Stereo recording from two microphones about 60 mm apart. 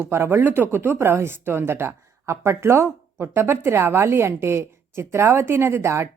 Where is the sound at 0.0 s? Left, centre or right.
Right.